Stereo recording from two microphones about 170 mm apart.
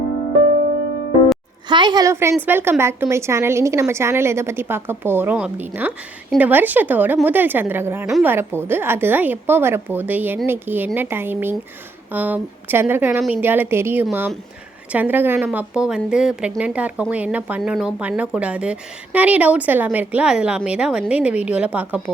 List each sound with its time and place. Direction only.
1.6 s a woman's voice: 25° right (ahead or behind); by 22.1 s 10° right (ahead or behind)